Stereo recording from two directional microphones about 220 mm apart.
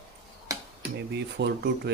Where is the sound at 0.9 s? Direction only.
50° right (ahead or behind).